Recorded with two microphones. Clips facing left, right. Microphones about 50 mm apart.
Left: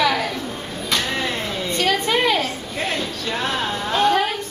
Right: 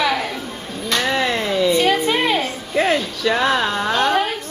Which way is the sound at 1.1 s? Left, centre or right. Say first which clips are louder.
Right 5 dB; right.